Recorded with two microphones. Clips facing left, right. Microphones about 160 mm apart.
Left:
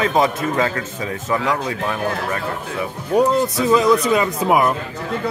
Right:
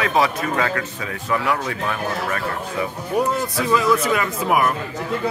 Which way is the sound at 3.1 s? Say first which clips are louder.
Left 6 dB; 20° left (ahead or behind).